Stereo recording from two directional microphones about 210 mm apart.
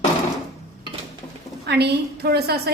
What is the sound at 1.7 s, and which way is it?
A woman's voice, 50° right (ahead or behind).